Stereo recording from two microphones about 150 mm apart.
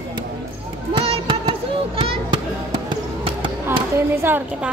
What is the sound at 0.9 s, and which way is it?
Child singing, 35° right (ahead or behind).